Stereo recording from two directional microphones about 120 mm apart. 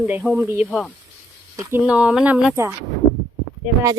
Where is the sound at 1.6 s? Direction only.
20° right (ahead or behind).